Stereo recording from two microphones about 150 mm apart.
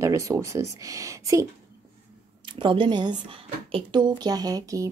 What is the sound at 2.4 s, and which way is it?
A woman's voice, 35° right (ahead or behind).